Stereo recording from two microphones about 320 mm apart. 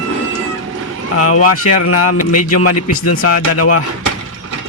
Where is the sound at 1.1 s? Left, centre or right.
Left.